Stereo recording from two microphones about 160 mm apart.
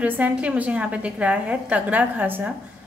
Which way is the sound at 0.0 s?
10° right (ahead or behind).